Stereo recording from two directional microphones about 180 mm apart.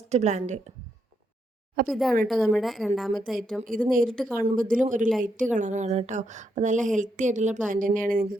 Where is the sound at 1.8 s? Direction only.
Centre (ahead or behind).